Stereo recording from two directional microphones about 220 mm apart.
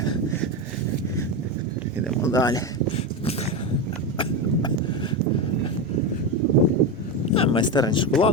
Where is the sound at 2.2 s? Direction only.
15° left (ahead or behind).